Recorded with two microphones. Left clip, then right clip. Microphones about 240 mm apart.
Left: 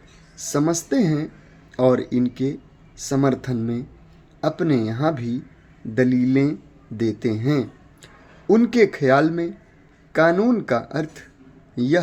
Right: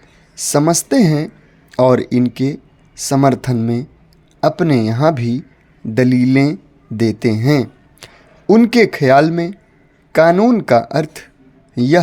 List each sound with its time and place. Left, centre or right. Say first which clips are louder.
0.3 s a man's voice: right 8 dB; right